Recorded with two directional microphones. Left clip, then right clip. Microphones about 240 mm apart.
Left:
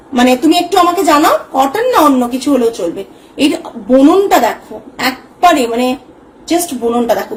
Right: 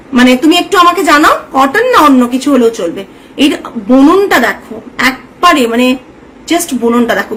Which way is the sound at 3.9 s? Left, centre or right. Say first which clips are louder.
Right 1 dB; centre.